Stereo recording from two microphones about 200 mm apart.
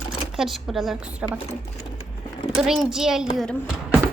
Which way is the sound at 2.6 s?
Centre (ahead or behind).